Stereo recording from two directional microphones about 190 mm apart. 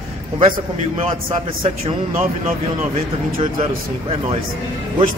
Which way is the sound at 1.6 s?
35° right (ahead or behind).